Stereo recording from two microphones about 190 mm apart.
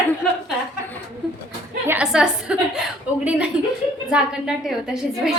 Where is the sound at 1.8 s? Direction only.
5° right (ahead or behind).